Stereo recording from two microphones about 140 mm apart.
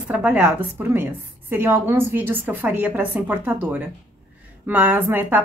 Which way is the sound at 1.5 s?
15° right (ahead or behind).